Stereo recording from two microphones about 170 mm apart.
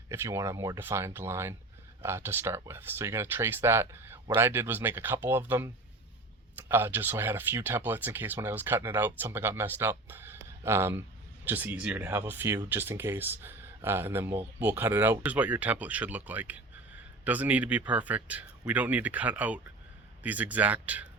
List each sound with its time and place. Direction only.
0.1 s speech: 15° right (ahead or behind)